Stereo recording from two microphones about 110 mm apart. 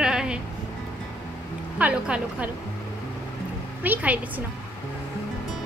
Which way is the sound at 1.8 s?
10° right (ahead or behind).